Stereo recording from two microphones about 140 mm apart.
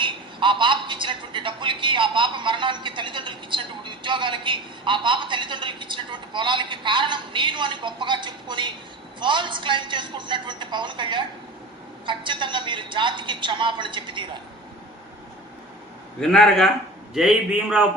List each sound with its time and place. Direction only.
0.0 s a man's voice: 35° right (ahead or behind)
16.2 s a man's voice: 5° left (ahead or behind)